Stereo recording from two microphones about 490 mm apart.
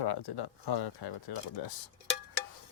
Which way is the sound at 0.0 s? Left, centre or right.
Left.